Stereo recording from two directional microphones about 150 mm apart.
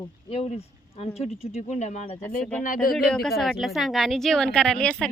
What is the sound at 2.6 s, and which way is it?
Speech, 70° left (ahead or behind).